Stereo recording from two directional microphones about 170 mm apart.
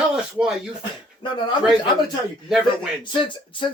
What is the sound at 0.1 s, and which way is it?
Speech, 5° right (ahead or behind).